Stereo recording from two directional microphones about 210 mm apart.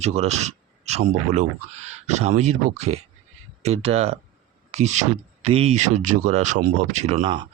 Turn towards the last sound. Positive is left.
turn(degrees=-30)  # may be behind; listen again after turning